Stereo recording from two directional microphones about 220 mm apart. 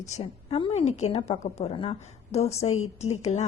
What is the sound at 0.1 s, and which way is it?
A woman's voice, 25° left (ahead or behind).